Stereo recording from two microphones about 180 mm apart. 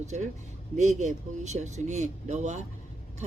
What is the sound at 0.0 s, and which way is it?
Speech, 40° right (ahead or behind).